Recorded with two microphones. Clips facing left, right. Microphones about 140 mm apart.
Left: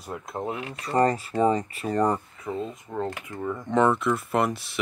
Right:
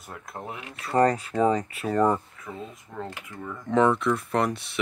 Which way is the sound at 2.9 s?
25° left (ahead or behind).